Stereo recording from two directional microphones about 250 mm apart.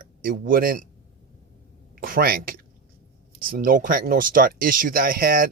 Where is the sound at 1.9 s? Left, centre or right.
Right.